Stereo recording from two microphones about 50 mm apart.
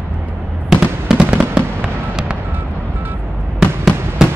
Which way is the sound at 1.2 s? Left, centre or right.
Right.